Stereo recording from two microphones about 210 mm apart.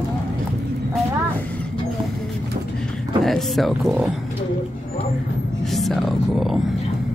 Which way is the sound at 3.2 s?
Centre (ahead or behind).